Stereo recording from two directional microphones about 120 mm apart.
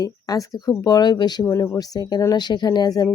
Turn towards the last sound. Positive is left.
turn(degrees=35)  # may be behind; listen again after turning